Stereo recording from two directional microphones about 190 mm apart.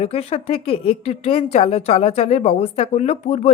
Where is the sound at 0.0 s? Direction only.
30° left (ahead or behind).